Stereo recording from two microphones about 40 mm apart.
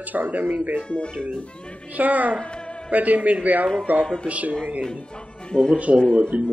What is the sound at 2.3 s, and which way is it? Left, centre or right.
Speech, left.